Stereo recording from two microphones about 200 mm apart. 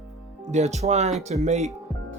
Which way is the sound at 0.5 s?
35° right (ahead or behind).